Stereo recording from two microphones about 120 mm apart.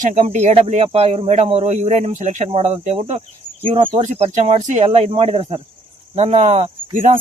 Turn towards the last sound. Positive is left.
turn(degrees=-90)